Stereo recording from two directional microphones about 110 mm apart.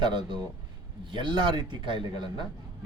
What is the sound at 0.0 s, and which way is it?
Speech, 45° right (ahead or behind).